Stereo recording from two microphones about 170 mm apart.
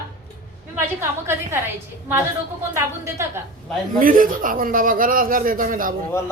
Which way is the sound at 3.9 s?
55° right (ahead or behind).